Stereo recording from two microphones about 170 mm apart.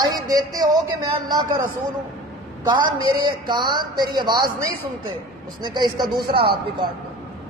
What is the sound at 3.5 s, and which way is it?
Speech, 25° right (ahead or behind).